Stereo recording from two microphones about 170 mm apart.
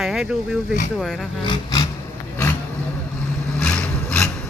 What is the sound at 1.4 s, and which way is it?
Roar, 25° left (ahead or behind).